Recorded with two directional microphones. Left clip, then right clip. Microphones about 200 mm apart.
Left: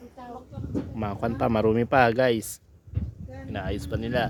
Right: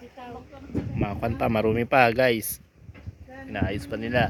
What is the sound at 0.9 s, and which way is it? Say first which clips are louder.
Speech: right 1 dB; 20° left (ahead or behind).